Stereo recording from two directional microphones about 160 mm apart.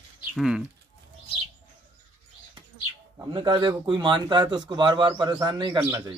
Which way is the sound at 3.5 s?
30° right (ahead or behind).